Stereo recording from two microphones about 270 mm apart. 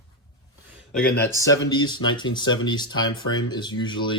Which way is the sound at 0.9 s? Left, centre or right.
Centre.